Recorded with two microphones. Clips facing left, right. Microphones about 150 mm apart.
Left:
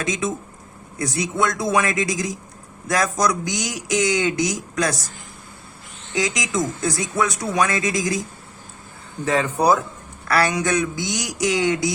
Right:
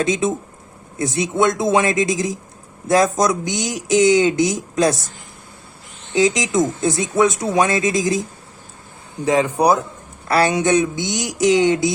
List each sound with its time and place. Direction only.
0.0 s speech: 30° right (ahead or behind)
6.1 s speech: 25° right (ahead or behind)
9.2 s speech: 15° right (ahead or behind)